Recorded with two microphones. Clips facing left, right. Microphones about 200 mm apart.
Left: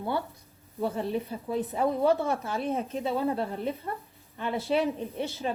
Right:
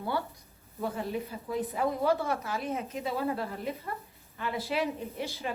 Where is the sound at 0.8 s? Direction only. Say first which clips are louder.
Left 4 dB; 30° left (ahead or behind).